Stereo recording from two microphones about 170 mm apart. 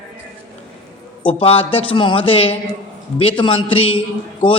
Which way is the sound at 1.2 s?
35° left (ahead or behind).